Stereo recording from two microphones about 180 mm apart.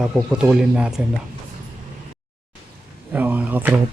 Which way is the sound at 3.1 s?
10° right (ahead or behind).